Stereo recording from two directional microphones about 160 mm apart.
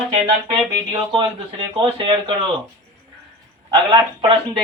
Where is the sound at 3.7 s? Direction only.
30° right (ahead or behind).